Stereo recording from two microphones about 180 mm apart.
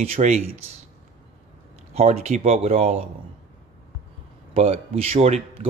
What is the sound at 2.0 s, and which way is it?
Speech, 35° right (ahead or behind).